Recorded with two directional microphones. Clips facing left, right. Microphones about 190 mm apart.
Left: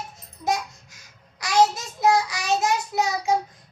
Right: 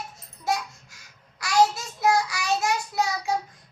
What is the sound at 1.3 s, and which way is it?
Child singing, 20° left (ahead or behind).